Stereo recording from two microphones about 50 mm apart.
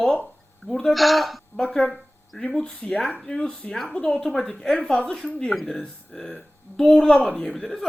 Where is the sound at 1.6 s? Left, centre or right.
Centre.